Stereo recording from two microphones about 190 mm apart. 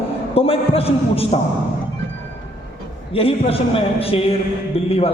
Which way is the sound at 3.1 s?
30° left (ahead or behind).